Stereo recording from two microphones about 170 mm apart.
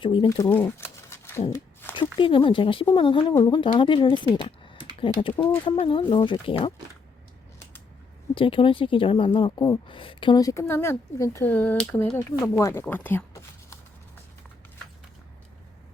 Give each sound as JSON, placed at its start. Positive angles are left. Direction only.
{"t": 0.0, "sound": "speech", "side_deg": 30}
{"t": 0.3, "sound": "a sound", "side_deg": 15}
{"t": 2.1, "sound": "speech", "side_deg": 30}
{"t": 4.4, "sound": "typing", "side_deg": 30}
{"t": 4.9, "sound": "speech", "side_deg": 30}
{"t": 8.4, "sound": "speech", "side_deg": 30}